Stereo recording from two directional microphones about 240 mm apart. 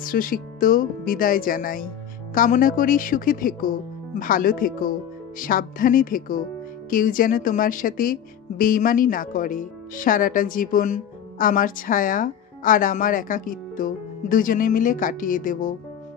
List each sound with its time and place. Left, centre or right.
0.0 s speech: left